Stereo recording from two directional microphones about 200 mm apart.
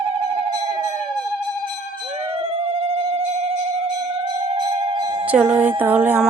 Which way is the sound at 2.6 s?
30° right (ahead or behind).